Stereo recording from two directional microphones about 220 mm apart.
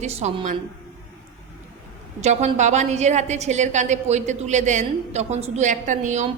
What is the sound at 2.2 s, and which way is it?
A woman's voice, 30° right (ahead or behind).